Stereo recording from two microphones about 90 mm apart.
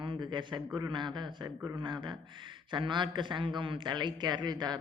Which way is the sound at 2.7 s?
60° right (ahead or behind).